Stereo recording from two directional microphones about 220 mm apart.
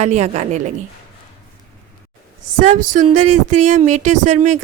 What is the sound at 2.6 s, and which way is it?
Speech, 35° right (ahead or behind).